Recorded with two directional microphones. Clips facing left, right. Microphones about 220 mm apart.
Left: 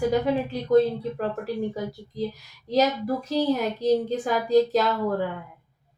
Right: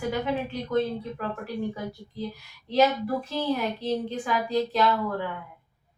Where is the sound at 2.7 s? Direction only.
40° left (ahead or behind).